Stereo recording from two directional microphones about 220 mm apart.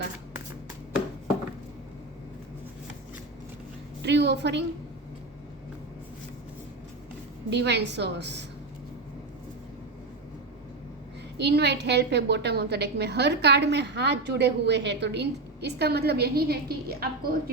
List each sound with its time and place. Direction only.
4.0 s a woman's voice: 50° right (ahead or behind)
7.5 s a woman's voice: 50° right (ahead or behind)
11.3 s a woman's voice: 50° right (ahead or behind)